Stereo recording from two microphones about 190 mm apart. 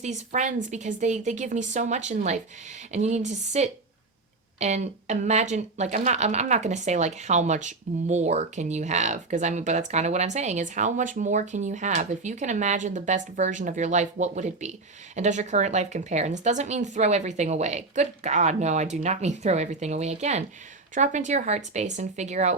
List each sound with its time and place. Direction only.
0.0 s speech: 40° right (ahead or behind)